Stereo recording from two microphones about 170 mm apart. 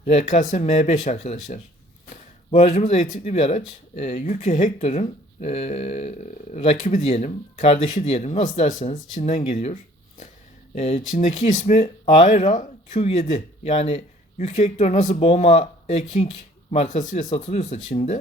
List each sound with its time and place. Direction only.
0.1 s speech: 40° left (ahead or behind)
10.8 s speech: 40° left (ahead or behind)